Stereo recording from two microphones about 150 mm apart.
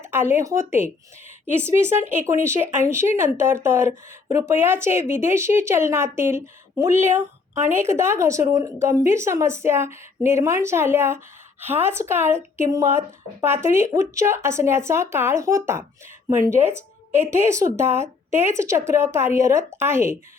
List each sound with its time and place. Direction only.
0.1 s speech: 15° right (ahead or behind)